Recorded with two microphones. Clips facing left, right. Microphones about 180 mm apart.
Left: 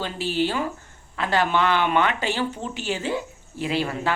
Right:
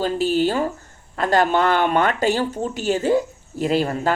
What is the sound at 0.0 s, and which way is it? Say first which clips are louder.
Speech: right 6 dB; 45° right (ahead or behind).